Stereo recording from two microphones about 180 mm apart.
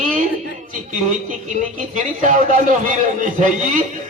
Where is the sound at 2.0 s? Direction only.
45° right (ahead or behind).